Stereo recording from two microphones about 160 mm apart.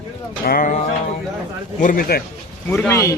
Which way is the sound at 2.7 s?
15° left (ahead or behind).